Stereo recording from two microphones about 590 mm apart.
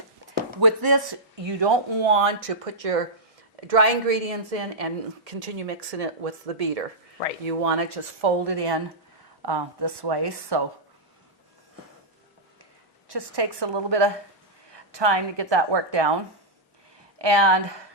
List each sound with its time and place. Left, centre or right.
0.6 s a woman's voice: right
8.2 s a woman's voice: right
13.1 s a woman's voice: right
17.2 s speech: right